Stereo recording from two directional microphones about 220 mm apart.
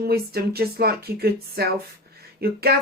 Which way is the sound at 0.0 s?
45° right (ahead or behind).